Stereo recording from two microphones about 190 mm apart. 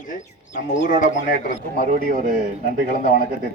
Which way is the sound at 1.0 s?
45° left (ahead or behind).